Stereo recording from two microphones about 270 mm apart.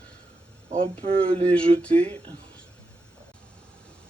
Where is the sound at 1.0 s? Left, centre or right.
Right.